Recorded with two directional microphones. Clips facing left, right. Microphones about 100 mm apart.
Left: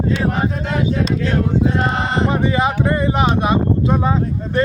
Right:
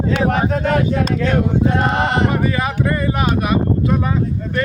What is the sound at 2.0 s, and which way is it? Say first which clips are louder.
Speech: right 2 dB; 65° right (ahead or behind).